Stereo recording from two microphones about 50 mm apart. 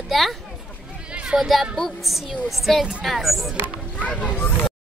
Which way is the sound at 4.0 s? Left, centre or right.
Left.